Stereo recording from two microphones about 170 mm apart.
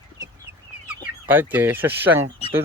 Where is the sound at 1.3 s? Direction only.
10° right (ahead or behind).